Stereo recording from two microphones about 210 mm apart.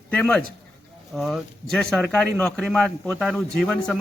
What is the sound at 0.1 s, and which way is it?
A man's voice, 5° left (ahead or behind).